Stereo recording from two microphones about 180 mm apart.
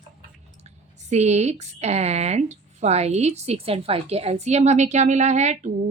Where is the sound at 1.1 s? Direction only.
40° right (ahead or behind).